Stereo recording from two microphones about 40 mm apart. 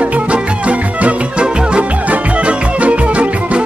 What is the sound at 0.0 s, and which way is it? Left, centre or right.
Music, right.